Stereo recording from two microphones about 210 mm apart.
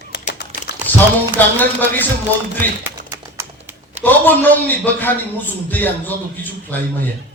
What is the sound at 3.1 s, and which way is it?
Typing, 10° right (ahead or behind).